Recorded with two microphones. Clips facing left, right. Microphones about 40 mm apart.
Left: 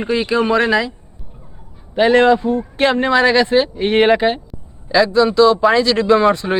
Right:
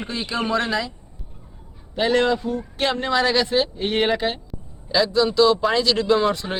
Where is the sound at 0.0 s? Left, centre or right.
Left.